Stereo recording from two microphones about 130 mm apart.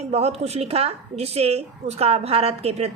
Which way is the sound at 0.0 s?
55° right (ahead or behind).